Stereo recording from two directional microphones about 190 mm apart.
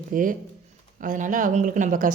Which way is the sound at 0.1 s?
45° right (ahead or behind).